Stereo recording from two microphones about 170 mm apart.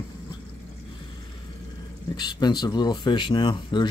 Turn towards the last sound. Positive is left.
turn(degrees=30)  # may be behind; listen again after turning